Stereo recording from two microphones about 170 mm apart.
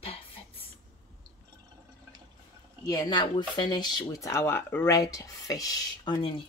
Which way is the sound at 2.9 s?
25° left (ahead or behind).